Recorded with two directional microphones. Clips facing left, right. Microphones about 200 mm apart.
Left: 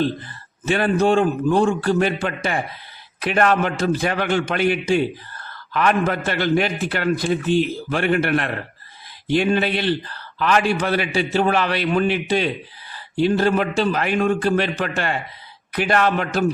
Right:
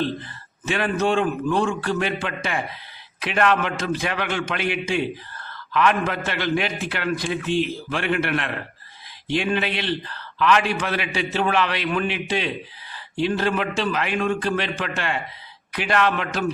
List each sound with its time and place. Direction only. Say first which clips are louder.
0.7 s a man's voice: left 4 dB; 40° left (ahead or behind)